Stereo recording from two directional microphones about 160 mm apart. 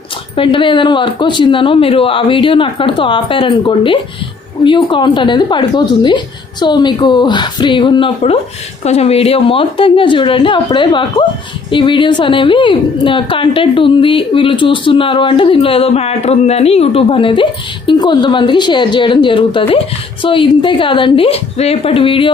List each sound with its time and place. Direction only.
0.3 s a woman's voice: 30° left (ahead or behind)